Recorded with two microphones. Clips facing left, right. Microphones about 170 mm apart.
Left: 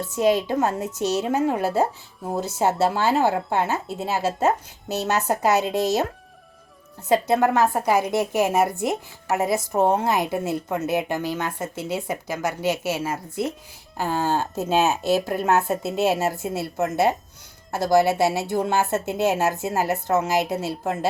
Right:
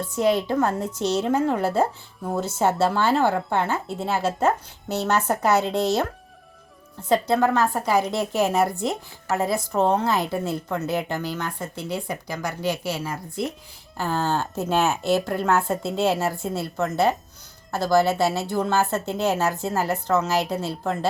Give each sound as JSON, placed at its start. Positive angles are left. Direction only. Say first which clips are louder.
{"t": 0.2, "sound": "a woman's voice", "louder": "left 1 dB", "side_deg": 15}
{"t": 1.1, "sound": "a woman's voice", "louder": "right 1 dB", "side_deg": 5}
{"t": 2.6, "sound": "speech", "louder": "even", "side_deg": 5}
{"t": 3.3, "sound": "a woman's voice", "louder": "even", "side_deg": 20}
{"t": 7.1, "sound": "a woman's voice", "louder": "left 1 dB", "side_deg": 20}